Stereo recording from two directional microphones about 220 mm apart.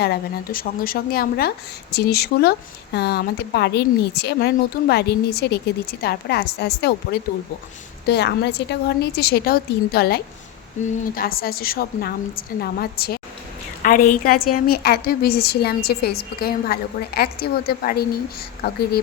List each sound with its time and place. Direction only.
0.0 s a woman's voice: 45° left (ahead or behind)
10.8 s a woman's voice: 35° left (ahead or behind)